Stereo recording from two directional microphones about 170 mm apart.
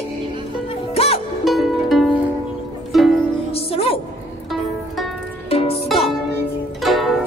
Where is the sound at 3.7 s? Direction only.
35° left (ahead or behind).